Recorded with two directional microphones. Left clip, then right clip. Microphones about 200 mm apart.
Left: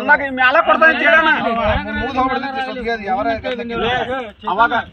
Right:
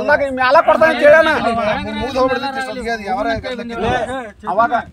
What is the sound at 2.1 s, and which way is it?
A man's voice, 15° right (ahead or behind).